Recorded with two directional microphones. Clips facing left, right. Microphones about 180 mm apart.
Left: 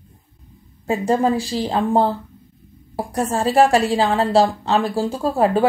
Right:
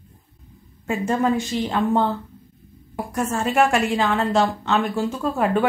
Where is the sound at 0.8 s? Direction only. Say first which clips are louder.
Left 3 dB; 35° left (ahead or behind).